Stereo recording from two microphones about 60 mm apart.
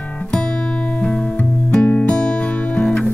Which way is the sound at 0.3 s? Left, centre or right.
Centre.